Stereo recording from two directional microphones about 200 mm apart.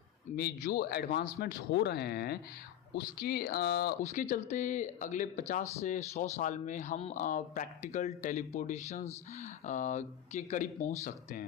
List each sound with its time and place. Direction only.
0.3 s speech: 50° left (ahead or behind)
4.0 s speech: 40° left (ahead or behind)